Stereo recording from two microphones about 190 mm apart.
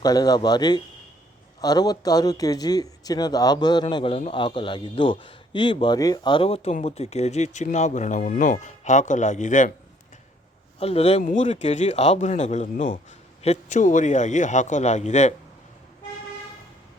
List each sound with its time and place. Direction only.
0.0 s speech: 20° left (ahead or behind); by 9.7 s 40° left (ahead or behind)
10.8 s speech: 30° left (ahead or behind)
11.2 s speech: 45° left (ahead or behind)